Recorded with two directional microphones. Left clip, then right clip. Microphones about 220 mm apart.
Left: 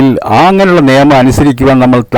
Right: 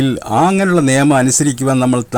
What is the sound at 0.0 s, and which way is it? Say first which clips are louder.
Speech: left 8 dB; 35° left (ahead or behind).